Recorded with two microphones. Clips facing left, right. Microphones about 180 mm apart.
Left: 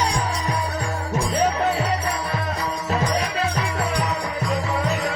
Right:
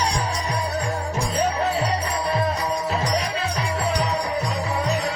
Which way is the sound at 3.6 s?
30° right (ahead or behind).